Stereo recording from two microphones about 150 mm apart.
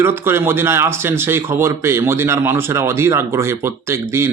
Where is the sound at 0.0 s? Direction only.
15° right (ahead or behind).